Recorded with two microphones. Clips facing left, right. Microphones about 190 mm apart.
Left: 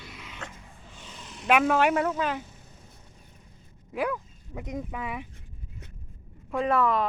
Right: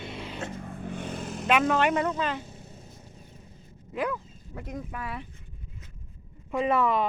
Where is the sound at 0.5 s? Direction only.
55° right (ahead or behind).